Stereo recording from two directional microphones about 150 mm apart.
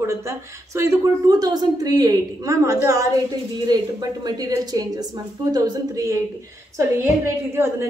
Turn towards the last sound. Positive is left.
turn(degrees=-15)  # may be behind; listen again after turning